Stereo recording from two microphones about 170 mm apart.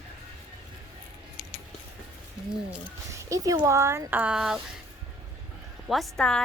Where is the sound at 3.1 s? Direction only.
20° right (ahead or behind); by 4.6 s 5° right (ahead or behind).